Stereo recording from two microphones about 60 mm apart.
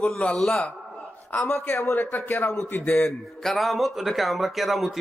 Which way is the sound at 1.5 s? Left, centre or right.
Left.